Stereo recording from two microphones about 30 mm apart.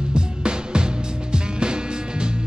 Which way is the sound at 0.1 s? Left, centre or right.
Right.